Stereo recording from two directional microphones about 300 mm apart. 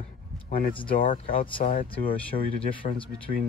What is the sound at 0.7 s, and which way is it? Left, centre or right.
Speech, centre.